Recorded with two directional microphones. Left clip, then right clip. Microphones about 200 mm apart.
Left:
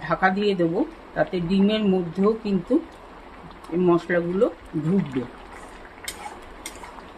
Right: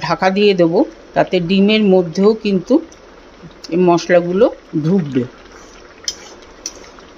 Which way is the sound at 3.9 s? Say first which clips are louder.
Right 9 dB; 40° right (ahead or behind).